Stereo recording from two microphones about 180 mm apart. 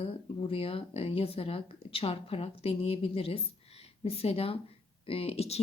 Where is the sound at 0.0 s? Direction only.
30° left (ahead or behind).